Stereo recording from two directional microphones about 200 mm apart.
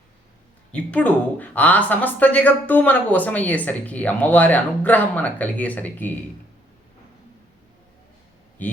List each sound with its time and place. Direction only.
0.7 s speech: 5° left (ahead or behind)
8.6 s a man's voice: 10° left (ahead or behind)